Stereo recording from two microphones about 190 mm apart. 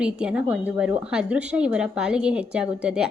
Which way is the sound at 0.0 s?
5° right (ahead or behind).